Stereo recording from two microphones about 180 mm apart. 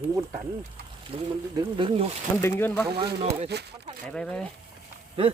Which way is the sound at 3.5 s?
65° right (ahead or behind).